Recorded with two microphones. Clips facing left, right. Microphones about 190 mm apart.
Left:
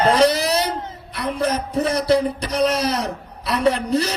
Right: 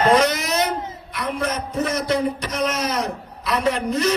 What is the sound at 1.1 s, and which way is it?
A man's voice, 35° left (ahead or behind).